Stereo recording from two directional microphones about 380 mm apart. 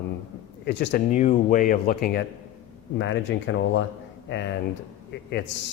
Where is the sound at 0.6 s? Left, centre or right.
Left.